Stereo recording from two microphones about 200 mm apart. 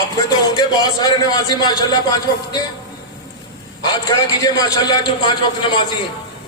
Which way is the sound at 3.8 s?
20° left (ahead or behind).